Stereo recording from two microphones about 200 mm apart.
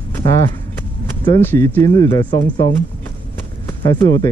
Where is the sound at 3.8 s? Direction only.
20° left (ahead or behind).